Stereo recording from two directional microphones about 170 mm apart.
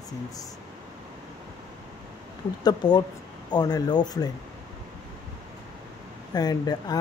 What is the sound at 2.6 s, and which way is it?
Speech, 25° left (ahead or behind).